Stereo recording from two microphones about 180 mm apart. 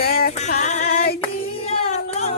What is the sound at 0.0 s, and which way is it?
Music, 55° left (ahead or behind).